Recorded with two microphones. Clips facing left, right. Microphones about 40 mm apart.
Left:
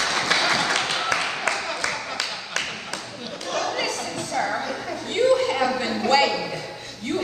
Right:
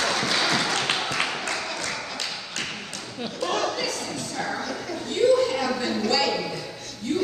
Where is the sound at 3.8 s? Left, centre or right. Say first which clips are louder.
Left 2 dB; left.